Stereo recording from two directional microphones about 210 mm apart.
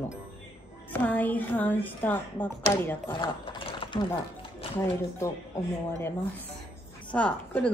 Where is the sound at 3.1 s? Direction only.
25° left (ahead or behind).